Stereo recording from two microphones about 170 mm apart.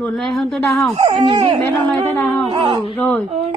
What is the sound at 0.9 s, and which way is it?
Speech, 25° right (ahead or behind).